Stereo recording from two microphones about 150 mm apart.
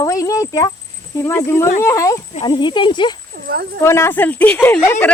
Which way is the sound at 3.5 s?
75° right (ahead or behind).